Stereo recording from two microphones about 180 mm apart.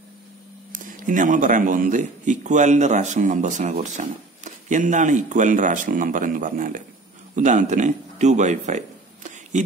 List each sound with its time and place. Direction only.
0.7 s speech: 45° right (ahead or behind)